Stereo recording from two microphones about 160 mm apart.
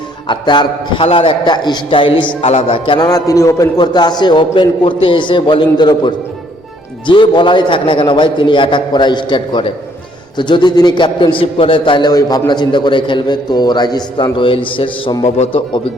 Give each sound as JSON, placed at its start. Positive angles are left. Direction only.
{"t": 0.3, "sound": "a man's voice", "side_deg": 30}